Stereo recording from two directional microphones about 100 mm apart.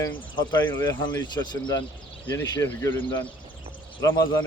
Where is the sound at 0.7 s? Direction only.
30° left (ahead or behind).